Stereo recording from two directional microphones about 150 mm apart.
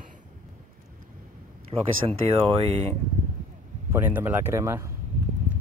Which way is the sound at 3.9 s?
15° right (ahead or behind).